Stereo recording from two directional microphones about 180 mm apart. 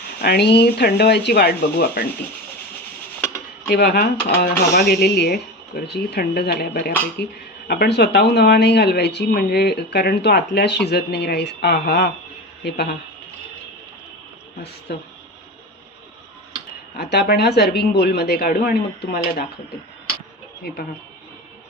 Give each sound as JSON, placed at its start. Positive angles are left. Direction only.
{"t": 0.2, "sound": "speech", "side_deg": 65}
{"t": 3.7, "sound": "speech", "side_deg": 65}
{"t": 14.9, "sound": "speech", "side_deg": 65}
{"t": 17.0, "sound": "speech", "side_deg": 60}
{"t": 20.6, "sound": "speech", "side_deg": 60}